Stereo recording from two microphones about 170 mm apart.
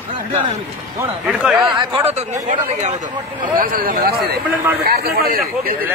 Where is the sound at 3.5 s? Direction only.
55° right (ahead or behind).